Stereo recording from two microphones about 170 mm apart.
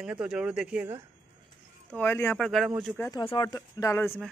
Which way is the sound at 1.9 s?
10° left (ahead or behind).